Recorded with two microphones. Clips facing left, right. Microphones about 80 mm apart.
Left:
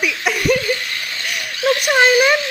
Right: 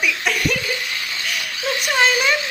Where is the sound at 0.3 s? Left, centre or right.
Centre.